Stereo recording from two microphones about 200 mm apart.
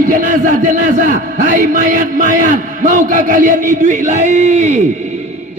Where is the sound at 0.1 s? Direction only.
40° right (ahead or behind).